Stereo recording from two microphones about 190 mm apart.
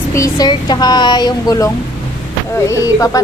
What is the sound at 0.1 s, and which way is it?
Speech, 20° left (ahead or behind).